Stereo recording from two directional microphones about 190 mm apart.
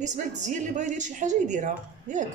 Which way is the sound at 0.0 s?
40° right (ahead or behind).